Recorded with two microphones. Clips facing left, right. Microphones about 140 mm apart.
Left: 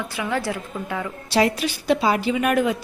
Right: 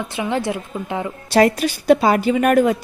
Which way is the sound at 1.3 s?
50° right (ahead or behind).